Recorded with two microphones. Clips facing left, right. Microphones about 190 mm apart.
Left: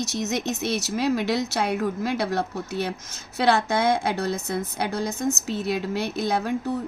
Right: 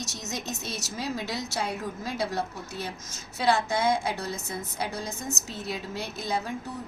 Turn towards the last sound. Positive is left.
turn(degrees=65)  # may be behind; listen again after turning